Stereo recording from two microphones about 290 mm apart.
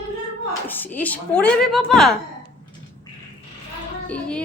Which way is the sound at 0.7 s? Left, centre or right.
Centre.